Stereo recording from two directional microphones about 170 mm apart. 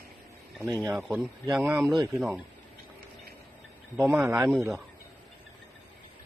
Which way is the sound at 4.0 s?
10° right (ahead or behind).